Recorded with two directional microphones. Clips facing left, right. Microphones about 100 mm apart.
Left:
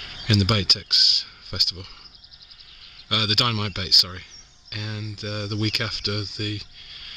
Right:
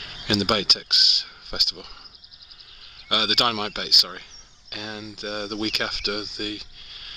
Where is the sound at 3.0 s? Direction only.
Centre (ahead or behind).